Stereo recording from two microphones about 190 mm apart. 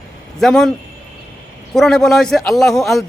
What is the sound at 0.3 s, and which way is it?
Speech, centre (ahead or behind).